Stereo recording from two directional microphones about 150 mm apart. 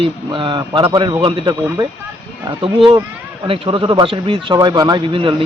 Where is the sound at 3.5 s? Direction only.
35° right (ahead or behind).